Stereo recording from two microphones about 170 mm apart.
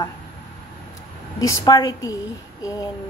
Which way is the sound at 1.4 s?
20° left (ahead or behind).